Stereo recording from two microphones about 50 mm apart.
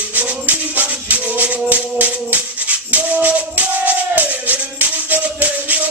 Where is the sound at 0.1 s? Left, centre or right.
Right.